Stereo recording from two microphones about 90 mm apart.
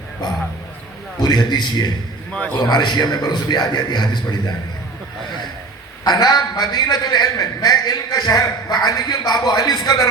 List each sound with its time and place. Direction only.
0.2 s a man's voice: 50° left (ahead or behind)
6.1 s a man's voice: 50° left (ahead or behind)